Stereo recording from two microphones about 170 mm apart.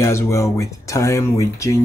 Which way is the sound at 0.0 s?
15° left (ahead or behind).